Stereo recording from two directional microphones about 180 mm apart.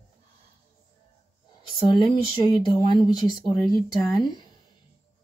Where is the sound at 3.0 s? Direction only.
25° left (ahead or behind).